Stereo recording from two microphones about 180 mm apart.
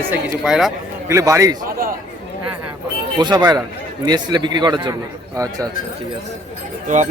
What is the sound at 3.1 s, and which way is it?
A man's voice, 25° right (ahead or behind).